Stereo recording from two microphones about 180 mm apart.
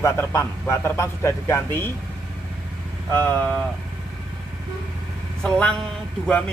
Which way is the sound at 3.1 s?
10° left (ahead or behind).